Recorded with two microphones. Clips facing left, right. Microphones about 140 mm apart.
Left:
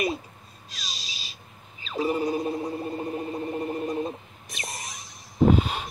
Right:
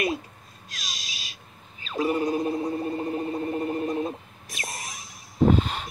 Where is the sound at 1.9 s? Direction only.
5° left (ahead or behind).